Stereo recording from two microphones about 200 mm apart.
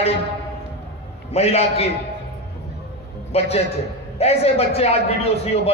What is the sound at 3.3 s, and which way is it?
A man's voice, 30° left (ahead or behind).